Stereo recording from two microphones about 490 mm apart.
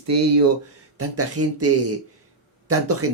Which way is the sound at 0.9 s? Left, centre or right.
Right.